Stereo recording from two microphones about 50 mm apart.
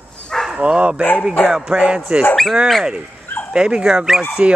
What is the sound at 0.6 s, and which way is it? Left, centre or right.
Speech, right.